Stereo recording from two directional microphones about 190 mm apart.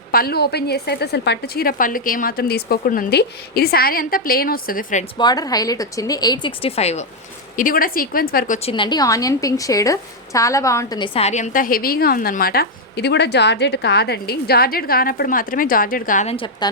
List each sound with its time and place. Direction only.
0.1 s a woman's voice: 55° left (ahead or behind)
5.1 s a woman's voice: 20° left (ahead or behind)
7.5 s a woman's voice: 45° left (ahead or behind)
8.5 s a woman's voice: 30° left (ahead or behind)
16.3 s a woman's voice: 25° left (ahead or behind)